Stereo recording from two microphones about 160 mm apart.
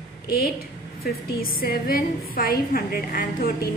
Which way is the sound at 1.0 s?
70° left (ahead or behind).